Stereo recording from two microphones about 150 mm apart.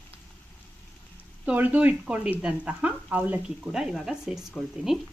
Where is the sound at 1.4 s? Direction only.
10° right (ahead or behind).